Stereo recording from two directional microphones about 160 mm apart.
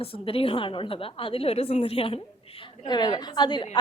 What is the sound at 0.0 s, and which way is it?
A woman's voice, 35° left (ahead or behind).